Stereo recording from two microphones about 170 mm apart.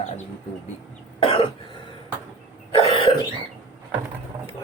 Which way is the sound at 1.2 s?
30° left (ahead or behind).